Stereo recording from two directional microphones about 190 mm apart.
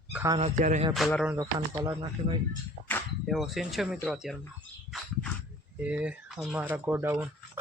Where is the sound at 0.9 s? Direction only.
Centre (ahead or behind).